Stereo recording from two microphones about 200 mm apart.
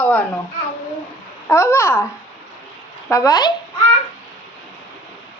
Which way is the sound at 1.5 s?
15° left (ahead or behind).